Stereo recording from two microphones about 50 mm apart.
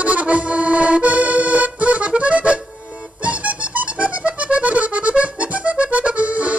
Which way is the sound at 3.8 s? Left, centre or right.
Right.